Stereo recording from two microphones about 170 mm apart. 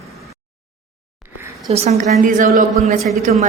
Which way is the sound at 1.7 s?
40° right (ahead or behind).